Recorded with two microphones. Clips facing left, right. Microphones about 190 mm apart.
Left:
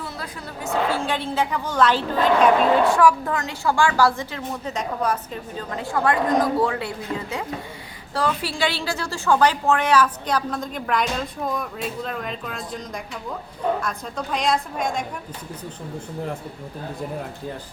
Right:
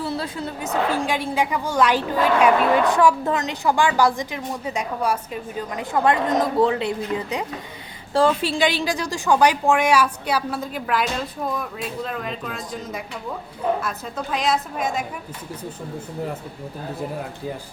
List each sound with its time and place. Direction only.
0.0 s a woman's voice: 25° right (ahead or behind); by 15.0 s 5° right (ahead or behind)